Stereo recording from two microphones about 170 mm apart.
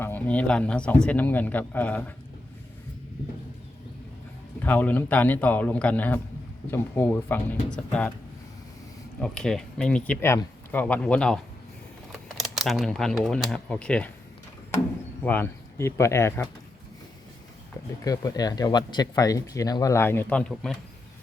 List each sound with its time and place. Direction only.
0.0 s a man's voice: 10° left (ahead or behind)
4.6 s a man's voice: 10° left (ahead or behind)
9.2 s speech: 5° left (ahead or behind)
12.1 s typing: centre (ahead or behind)
13.2 s speech: centre (ahead or behind)
15.2 s a man's voice: 10° left (ahead or behind)
18.0 s speech: 20° left (ahead or behind); by 20.7 s 5° left (ahead or behind)